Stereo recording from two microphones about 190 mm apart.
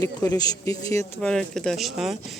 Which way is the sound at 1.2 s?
5° left (ahead or behind).